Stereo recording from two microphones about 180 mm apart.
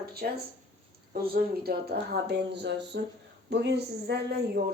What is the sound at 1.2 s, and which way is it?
Speech, 60° right (ahead or behind).